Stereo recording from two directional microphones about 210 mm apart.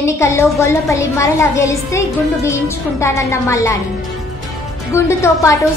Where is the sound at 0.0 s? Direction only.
15° left (ahead or behind).